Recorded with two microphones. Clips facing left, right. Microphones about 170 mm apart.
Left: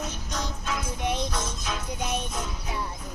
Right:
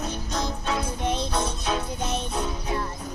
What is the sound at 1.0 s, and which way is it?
Music, 15° left (ahead or behind).